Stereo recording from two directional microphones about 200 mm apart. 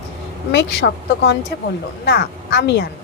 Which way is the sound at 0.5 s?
60° left (ahead or behind).